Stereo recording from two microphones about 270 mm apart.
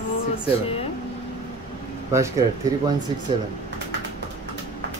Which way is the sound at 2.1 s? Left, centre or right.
Centre.